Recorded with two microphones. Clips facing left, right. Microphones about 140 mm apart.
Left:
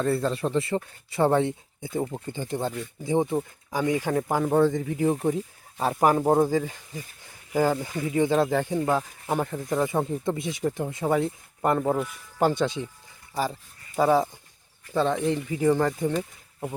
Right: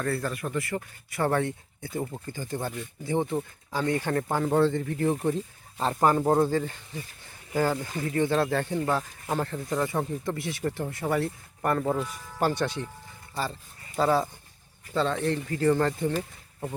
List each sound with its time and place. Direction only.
0.0 s speech: 25° left (ahead or behind)
7.3 s a sound: 15° left (ahead or behind)
8.1 s speech: 15° left (ahead or behind)